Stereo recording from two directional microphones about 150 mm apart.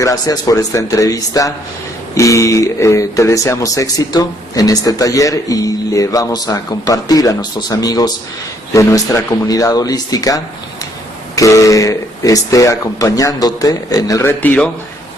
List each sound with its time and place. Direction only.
0.0 s speech: 20° left (ahead or behind)